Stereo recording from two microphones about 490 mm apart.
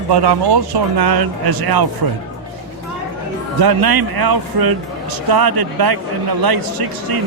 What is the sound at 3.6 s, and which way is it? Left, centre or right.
A man's voice, right.